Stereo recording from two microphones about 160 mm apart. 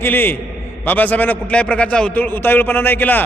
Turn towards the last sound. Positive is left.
turn(degrees=10)  # may be behind; listen again after turning